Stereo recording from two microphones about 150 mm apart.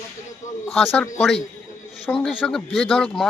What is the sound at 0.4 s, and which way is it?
Speech, 55° left (ahead or behind).